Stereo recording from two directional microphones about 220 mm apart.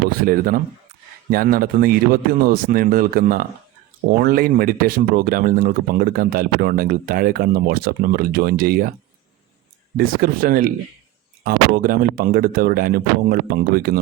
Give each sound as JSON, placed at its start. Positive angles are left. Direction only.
{"t": 0.2, "sound": "speech", "side_deg": -40}
{"t": 10.0, "sound": "speech", "side_deg": -40}